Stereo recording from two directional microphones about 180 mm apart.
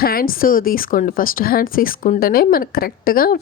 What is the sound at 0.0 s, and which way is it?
A woman's voice, 55° left (ahead or behind).